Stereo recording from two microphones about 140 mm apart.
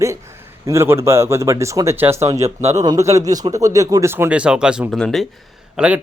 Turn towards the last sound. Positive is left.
turn(degrees=-10)  # may be behind; listen again after turning